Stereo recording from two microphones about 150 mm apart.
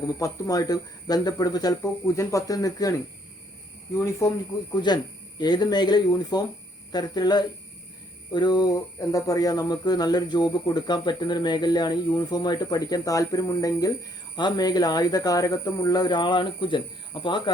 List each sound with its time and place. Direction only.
0.2 s speech: 25° left (ahead or behind)
3.9 s speech: 20° left (ahead or behind)